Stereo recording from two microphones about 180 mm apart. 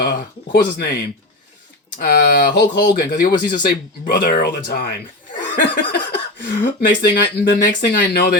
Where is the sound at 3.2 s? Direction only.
45° left (ahead or behind).